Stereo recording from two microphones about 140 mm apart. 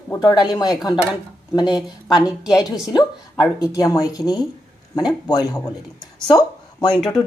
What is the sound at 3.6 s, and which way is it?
Speech, 25° left (ahead or behind).